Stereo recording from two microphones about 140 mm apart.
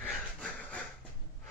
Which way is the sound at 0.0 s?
10° left (ahead or behind).